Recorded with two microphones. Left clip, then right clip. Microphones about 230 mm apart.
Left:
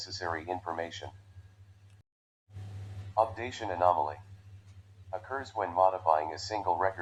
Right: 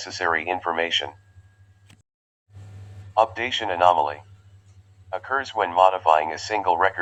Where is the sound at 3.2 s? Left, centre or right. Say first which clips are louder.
Right 9 dB; right.